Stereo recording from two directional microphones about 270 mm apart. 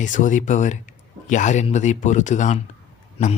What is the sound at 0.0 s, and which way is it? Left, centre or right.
Speech, left.